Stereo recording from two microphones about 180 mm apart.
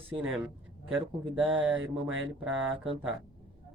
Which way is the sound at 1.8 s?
90° right.